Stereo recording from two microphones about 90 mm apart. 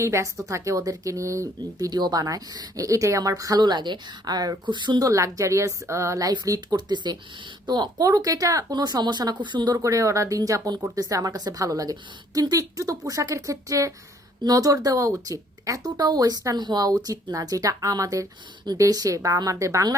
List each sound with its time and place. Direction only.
0.0 s speech: 30° right (ahead or behind)
1.9 s speech: 50° right (ahead or behind)
3.6 s a woman's voice: 55° right (ahead or behind)
5.0 s speech: 35° right (ahead or behind); by 9.7 s 60° right (ahead or behind)
9.7 s speech: 35° right (ahead or behind)